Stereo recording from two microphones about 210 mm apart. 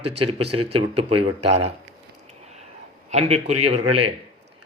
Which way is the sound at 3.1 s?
30° right (ahead or behind).